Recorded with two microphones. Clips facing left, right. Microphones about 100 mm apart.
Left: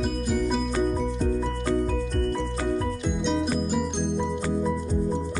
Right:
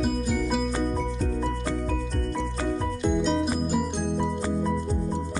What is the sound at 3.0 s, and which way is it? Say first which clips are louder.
Music: right 2 dB; centre (ahead or behind).